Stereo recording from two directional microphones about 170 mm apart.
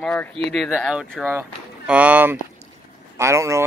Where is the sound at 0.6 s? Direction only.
5° right (ahead or behind).